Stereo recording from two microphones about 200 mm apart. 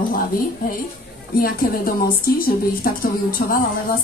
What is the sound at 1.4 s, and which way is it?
A woman's voice, 45° left (ahead or behind).